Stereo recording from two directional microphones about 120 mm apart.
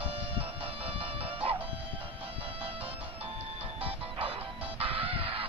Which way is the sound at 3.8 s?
50° right (ahead or behind).